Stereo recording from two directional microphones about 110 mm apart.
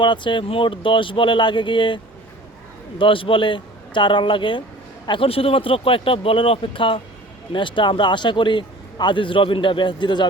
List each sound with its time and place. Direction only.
0.0 s a man's voice: 45° left (ahead or behind)
3.0 s a man's voice: 50° left (ahead or behind)